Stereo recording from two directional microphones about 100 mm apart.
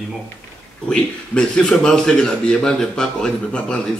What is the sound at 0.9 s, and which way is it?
A man's voice, 10° left (ahead or behind).